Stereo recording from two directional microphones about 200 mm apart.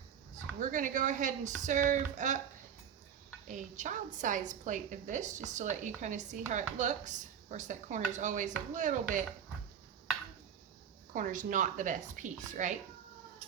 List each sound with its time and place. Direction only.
0.6 s a woman's voice: 40° right (ahead or behind)
3.5 s a woman's voice: 40° right (ahead or behind)
11.1 s a woman's voice: 40° right (ahead or behind)